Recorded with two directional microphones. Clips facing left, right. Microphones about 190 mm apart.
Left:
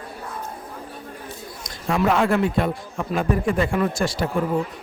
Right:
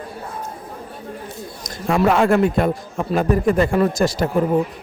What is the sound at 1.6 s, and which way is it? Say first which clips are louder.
A man's voice: right 4 dB; 45° right (ahead or behind).